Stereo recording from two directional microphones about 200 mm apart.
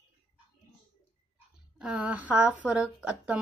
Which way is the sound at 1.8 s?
5° right (ahead or behind).